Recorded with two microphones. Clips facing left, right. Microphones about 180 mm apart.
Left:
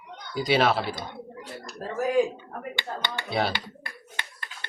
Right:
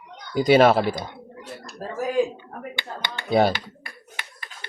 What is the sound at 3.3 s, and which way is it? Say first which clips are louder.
Speech: right 8 dB; 45° right (ahead or behind).